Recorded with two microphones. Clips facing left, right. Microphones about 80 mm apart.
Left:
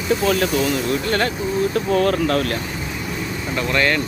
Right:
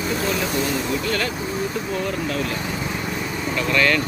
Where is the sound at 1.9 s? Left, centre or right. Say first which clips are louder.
Left 7 dB; left.